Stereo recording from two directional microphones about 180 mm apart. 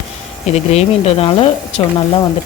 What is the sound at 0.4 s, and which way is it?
Speech, 35° left (ahead or behind).